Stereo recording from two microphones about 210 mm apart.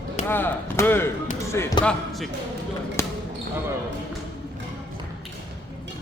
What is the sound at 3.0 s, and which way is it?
Basketball bounce, 15° left (ahead or behind).